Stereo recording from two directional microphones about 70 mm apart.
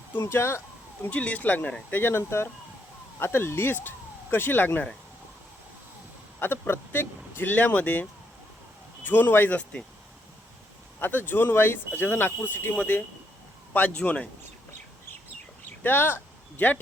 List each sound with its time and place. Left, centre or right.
0.2 s speech: left
1.1 s speech: left
6.4 s speech: left
7.5 s speech: left
9.0 s speech: left
11.0 s a man's voice: left
15.8 s speech: left